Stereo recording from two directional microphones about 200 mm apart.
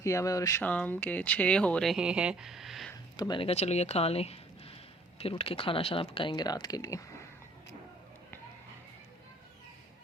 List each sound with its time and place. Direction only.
0.0 s speech: 15° left (ahead or behind); by 2.9 s centre (ahead or behind)
3.2 s speech: 20° left (ahead or behind)